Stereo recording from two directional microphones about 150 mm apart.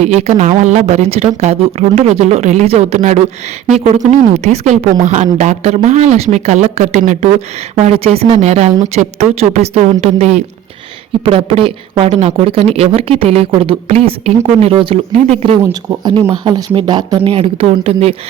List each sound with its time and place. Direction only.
0.0 s speech: 50° right (ahead or behind)
11.3 s speech: 40° right (ahead or behind)
15.6 s speech: 25° right (ahead or behind)